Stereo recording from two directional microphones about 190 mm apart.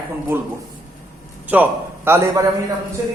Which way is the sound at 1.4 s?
10° right (ahead or behind).